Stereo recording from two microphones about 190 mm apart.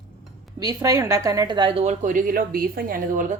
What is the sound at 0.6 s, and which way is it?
A woman's voice, 20° right (ahead or behind).